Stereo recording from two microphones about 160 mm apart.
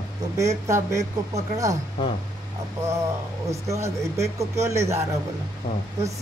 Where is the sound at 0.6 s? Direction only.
20° right (ahead or behind).